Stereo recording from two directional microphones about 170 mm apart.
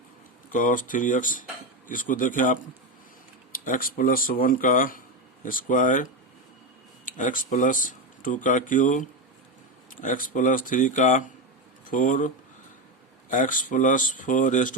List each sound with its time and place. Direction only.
0.5 s speech: 50° left (ahead or behind)
3.6 s speech: 55° left (ahead or behind)
13.3 s speech: 50° left (ahead or behind)